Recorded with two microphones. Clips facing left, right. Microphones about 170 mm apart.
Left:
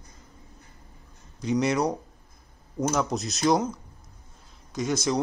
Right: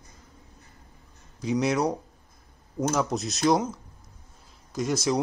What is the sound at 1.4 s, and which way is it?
Speech, centre (ahead or behind).